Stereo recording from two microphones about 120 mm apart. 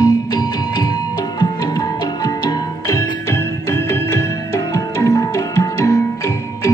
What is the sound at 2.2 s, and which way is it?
Music, 30° left (ahead or behind).